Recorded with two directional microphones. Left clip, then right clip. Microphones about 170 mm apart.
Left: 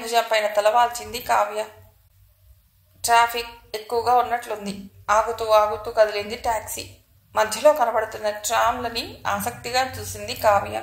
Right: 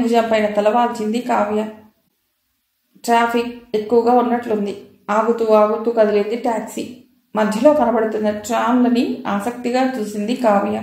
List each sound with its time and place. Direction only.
0.0 s a woman's voice: 35° left (ahead or behind)
3.0 s a woman's voice: 35° left (ahead or behind)